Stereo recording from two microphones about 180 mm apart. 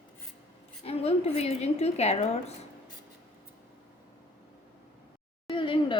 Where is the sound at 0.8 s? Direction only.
35° left (ahead or behind).